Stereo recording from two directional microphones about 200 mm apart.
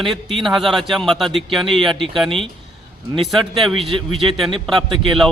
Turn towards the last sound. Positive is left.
turn(degrees=0)  # may be behind; listen again after turning